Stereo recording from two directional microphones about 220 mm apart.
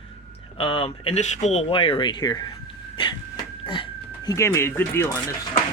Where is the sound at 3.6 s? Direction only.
20° left (ahead or behind).